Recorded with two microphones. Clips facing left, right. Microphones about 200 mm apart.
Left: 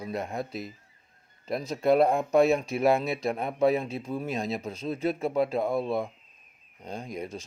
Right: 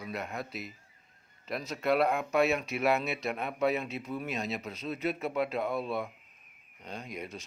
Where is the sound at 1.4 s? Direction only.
35° left (ahead or behind).